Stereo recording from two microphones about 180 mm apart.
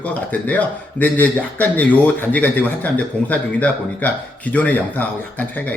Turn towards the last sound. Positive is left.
turn(degrees=10)  # may be behind; listen again after turning